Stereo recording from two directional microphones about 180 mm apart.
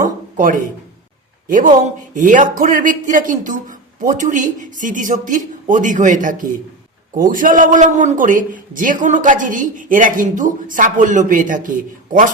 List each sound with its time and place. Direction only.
0.3 s a man's voice: 50° right (ahead or behind)